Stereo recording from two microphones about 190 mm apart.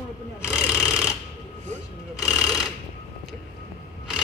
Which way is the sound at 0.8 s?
15° left (ahead or behind).